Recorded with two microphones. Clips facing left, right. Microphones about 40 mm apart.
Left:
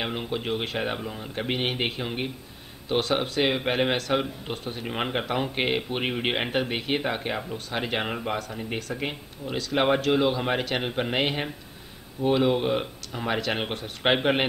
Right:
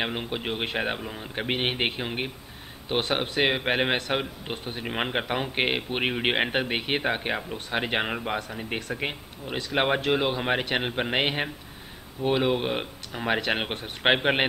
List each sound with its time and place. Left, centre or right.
0.3 s speech: centre
4.8 s speech: centre
10.0 s speech: right